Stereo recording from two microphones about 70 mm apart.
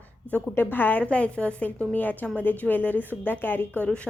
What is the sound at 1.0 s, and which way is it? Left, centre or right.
A woman's voice, centre.